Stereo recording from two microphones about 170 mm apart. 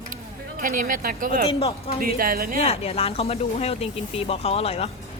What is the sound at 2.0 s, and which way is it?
Speech, 60° right (ahead or behind).